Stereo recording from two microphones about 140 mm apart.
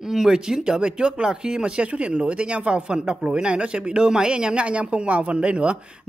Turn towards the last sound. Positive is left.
turn(degrees=-5)  # may be behind; listen again after turning